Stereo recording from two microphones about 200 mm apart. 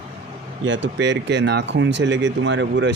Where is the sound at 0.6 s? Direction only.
70° right (ahead or behind).